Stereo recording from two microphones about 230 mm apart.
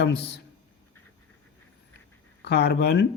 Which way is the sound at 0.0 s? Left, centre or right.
Left.